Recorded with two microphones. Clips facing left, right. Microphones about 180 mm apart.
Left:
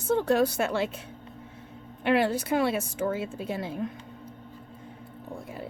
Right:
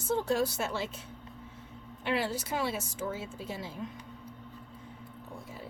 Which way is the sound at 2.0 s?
60° left (ahead or behind).